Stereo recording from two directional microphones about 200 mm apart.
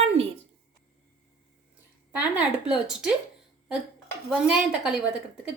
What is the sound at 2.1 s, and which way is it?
Speech, 5° right (ahead or behind).